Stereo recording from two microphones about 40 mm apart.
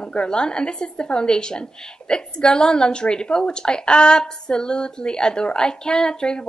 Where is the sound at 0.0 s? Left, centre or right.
Left.